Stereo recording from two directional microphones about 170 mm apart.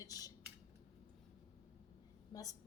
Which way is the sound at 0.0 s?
20° left (ahead or behind).